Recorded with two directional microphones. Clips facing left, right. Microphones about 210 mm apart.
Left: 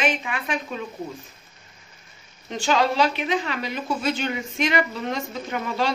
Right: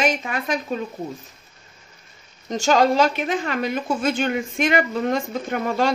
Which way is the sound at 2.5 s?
45° right (ahead or behind).